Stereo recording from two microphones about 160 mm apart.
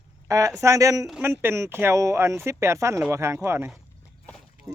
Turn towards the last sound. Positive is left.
turn(degrees=5)  # may be behind; listen again after turning